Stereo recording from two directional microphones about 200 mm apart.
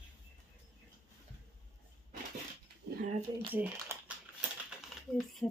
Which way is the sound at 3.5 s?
10° right (ahead or behind).